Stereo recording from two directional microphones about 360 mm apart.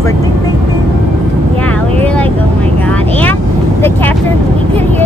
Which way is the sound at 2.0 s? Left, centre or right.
Centre.